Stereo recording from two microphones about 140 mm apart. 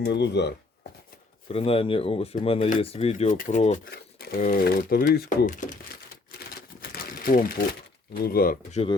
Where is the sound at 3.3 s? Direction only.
65° left (ahead or behind); by 8.6 s 90° left.